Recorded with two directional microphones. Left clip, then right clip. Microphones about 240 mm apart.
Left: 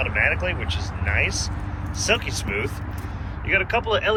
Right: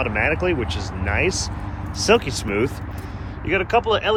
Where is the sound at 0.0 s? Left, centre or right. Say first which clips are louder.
Right 1 dB; right.